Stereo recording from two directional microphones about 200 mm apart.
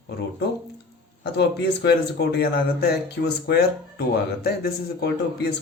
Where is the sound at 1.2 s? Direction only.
55° left (ahead or behind).